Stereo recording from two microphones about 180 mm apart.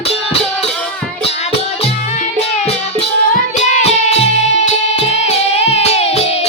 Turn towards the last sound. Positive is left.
turn(degrees=35)  # may be behind; listen again after turning